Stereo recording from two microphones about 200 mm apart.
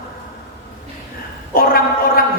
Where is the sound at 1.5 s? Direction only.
50° left (ahead or behind).